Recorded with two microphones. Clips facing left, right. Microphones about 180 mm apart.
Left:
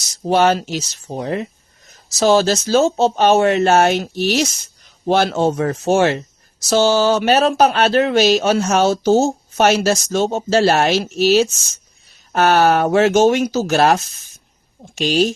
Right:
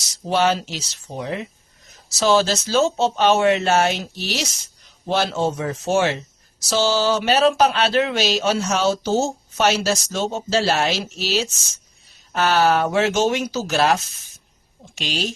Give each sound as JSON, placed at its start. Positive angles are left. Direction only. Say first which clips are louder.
{"t": 0.1, "sound": "speech", "louder": "left 5 dB", "side_deg": 50}